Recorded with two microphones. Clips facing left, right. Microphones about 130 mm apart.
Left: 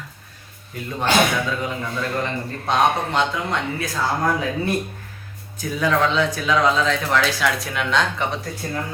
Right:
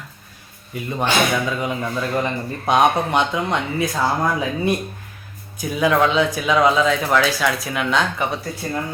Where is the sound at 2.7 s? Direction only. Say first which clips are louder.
Right 3 dB; 15° right (ahead or behind).